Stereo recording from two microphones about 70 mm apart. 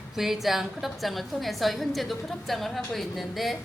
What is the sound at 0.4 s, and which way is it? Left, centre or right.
A woman's voice, centre.